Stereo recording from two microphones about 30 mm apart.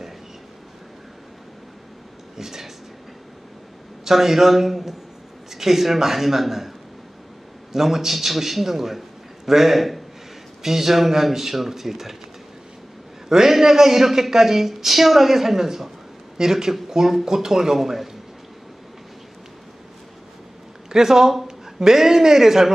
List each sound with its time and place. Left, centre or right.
2.3 s a sound: centre
4.0 s speech: centre
7.7 s speech: centre
13.3 s speech: centre
20.9 s speech: centre